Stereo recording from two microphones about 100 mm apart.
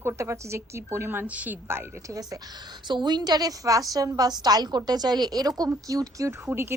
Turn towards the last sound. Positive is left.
turn(degrees=-25)  # may be behind; listen again after turning